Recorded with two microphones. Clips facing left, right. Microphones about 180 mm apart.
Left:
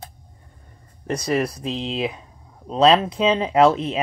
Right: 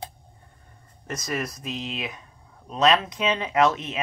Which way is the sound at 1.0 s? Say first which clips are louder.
Left 8 dB; 30° left (ahead or behind).